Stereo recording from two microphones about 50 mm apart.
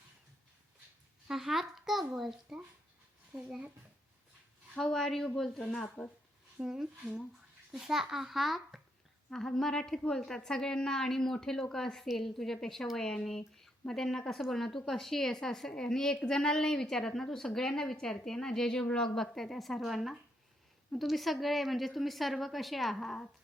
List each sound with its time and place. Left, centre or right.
1.3 s a child's voice: centre
4.8 s a woman's voice: centre
6.6 s speech: right
7.7 s a child's voice: centre
9.3 s a woman's voice: centre